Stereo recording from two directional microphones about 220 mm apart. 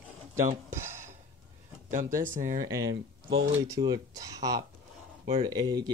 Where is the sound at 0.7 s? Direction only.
10° right (ahead or behind).